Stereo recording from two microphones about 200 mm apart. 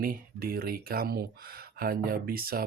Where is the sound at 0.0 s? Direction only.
45° right (ahead or behind).